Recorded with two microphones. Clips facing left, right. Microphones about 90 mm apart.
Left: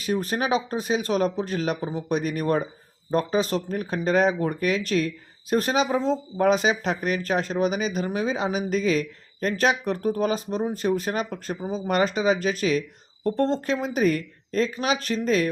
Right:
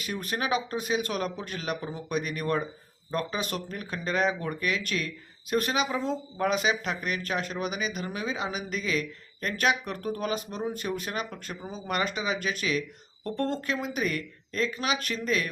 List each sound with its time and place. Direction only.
0.0 s speech: 35° left (ahead or behind)